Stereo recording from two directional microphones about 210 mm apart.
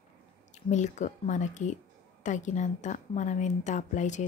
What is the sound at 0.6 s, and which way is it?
A woman's voice, 35° left (ahead or behind).